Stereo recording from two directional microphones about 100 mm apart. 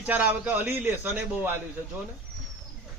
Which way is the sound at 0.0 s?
15° right (ahead or behind).